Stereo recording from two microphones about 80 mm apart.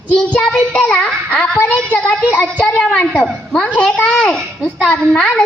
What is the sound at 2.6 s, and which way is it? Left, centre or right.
A child's voice, centre.